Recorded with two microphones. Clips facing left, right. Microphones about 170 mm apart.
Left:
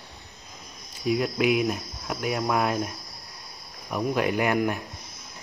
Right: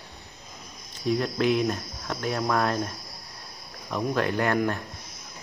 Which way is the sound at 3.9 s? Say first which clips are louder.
Left 1 dB; 10° left (ahead or behind).